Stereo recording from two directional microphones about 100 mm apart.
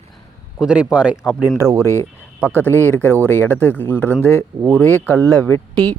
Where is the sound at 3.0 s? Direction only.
25° right (ahead or behind).